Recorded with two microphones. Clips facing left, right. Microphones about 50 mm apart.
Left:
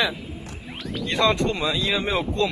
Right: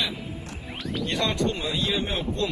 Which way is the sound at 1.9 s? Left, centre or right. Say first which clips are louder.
Left 4 dB; left.